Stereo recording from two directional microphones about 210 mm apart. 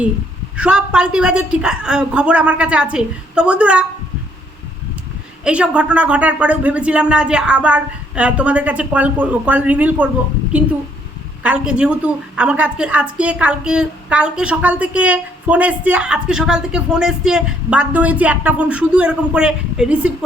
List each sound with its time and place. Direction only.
0.5 s a woman's voice: 5° right (ahead or behind)
5.5 s speech: 5° right (ahead or behind)
11.4 s a woman's voice: 5° right (ahead or behind)